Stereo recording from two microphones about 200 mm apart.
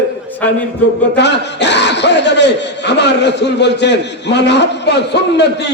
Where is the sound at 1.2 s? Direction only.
60° left (ahead or behind).